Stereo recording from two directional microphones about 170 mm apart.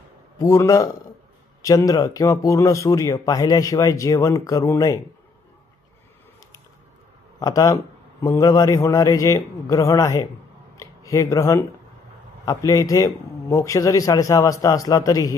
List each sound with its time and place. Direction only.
0.4 s speech: 20° left (ahead or behind)
7.3 s speech: 20° left (ahead or behind)
10.8 s a sound: 20° left (ahead or behind)
12.4 s speech: 20° left (ahead or behind)